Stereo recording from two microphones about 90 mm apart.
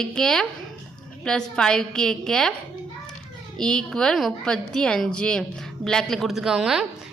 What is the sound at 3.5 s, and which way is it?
A woman's voice, 5° left (ahead or behind).